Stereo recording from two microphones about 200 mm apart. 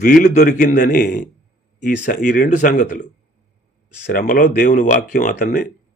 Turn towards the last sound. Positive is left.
turn(degrees=45)  # may be behind; listen again after turning